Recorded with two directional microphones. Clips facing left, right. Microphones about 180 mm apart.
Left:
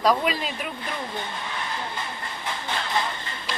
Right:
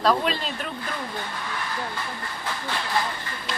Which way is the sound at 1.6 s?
20° left (ahead or behind).